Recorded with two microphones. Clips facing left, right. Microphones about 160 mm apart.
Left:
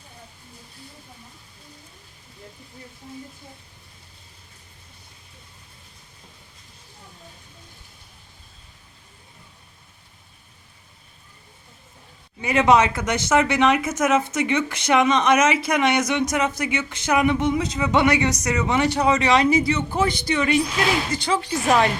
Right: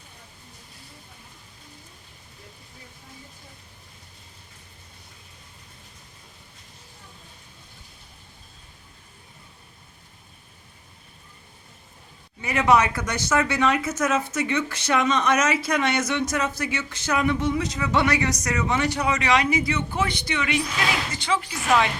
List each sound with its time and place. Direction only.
12.4 s speech: 20° left (ahead or behind); by 21.8 s 35° left (ahead or behind)